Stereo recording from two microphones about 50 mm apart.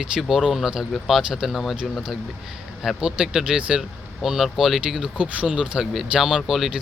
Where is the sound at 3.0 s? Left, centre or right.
Centre.